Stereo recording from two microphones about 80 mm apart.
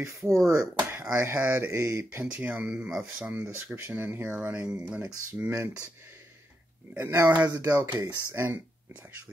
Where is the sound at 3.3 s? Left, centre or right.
Right.